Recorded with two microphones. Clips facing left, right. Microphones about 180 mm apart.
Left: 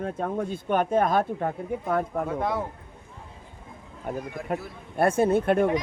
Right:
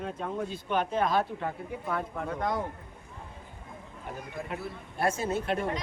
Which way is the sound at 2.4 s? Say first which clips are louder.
Left 1 dB; 5° left (ahead or behind).